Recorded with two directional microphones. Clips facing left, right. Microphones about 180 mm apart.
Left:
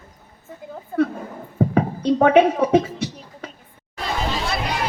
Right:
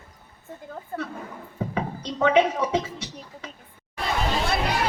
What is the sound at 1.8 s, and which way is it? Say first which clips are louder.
Speech: left 8 dB; 55° left (ahead or behind).